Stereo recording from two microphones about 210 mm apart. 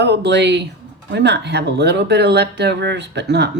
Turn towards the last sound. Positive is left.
turn(degrees=-55)  # may be behind; listen again after turning